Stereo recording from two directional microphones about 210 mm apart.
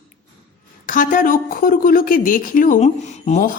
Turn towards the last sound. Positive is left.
turn(degrees=35)  # may be behind; listen again after turning